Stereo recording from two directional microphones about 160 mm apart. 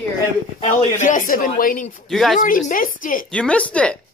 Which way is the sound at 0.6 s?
50° left (ahead or behind).